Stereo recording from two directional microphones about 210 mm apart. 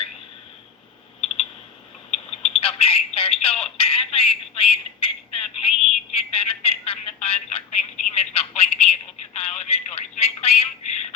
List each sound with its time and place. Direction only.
2.0 s telephone: 30° left (ahead or behind)